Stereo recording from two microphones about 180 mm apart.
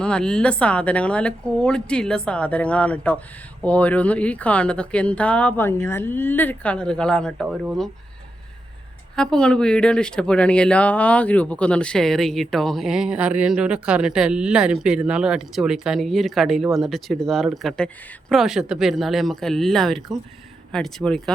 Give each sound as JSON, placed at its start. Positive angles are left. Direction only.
{"t": 0.0, "sound": "speech", "side_deg": 5}
{"t": 9.1, "sound": "speech", "side_deg": 5}